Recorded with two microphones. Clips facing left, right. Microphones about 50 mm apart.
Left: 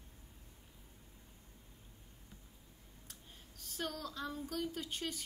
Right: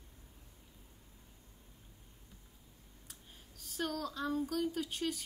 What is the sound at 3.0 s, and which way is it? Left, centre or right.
Speech, centre.